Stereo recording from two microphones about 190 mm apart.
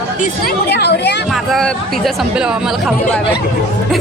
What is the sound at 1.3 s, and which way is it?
Speech, centre (ahead or behind).